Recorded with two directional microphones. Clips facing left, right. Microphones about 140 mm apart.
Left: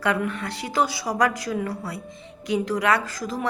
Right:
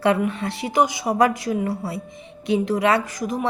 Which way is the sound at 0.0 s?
25° right (ahead or behind).